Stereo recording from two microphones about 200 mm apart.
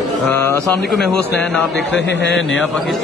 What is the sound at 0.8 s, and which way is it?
Speech, centre (ahead or behind).